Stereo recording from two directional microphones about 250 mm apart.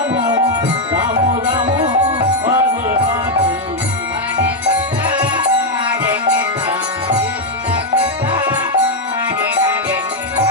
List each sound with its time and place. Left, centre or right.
0.9 s music: centre